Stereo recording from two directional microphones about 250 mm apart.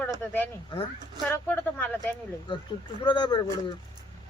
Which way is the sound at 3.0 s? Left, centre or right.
Centre.